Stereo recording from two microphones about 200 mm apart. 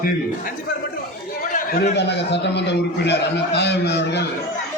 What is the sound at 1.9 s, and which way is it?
A man's voice, 60° left (ahead or behind).